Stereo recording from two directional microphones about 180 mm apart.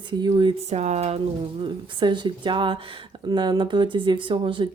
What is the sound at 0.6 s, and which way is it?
Speech, 35° right (ahead or behind).